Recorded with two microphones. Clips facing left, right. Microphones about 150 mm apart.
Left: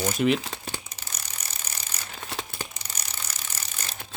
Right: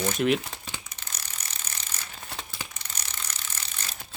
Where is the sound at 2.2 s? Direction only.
90° left.